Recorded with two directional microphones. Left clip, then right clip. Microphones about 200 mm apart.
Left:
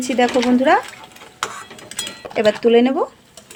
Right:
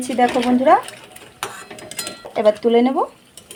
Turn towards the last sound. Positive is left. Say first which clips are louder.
# left 2 dB
turn(degrees=10)  # may be behind; listen again after turning